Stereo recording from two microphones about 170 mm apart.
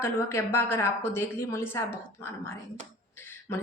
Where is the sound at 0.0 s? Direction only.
15° left (ahead or behind).